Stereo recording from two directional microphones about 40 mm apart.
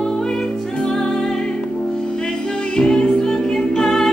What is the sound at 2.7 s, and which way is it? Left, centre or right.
Music, left.